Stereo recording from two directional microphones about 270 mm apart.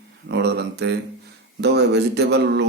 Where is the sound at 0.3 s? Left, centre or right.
Right.